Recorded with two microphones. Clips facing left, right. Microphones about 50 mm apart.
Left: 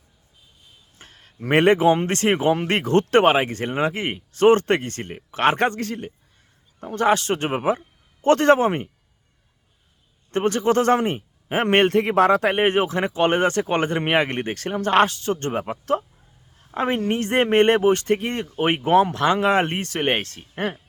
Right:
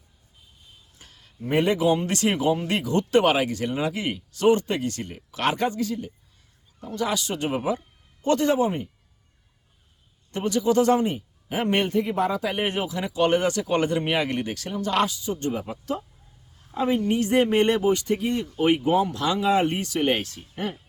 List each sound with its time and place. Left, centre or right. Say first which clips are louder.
0.9 s a sound: left 7 dB; left
1.4 s speech: left 6 dB; left
1.8 s a man's voice: left 4 dB; left
3.2 s speech: left 3 dB; left
5.5 s a man's voice: left 3 dB; left
10.3 s a man's voice: left 2 dB; left